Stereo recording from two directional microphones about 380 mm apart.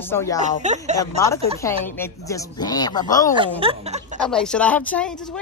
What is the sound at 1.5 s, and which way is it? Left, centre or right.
Speech, centre.